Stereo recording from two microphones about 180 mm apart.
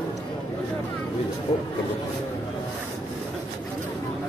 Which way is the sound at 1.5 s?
30° left (ahead or behind).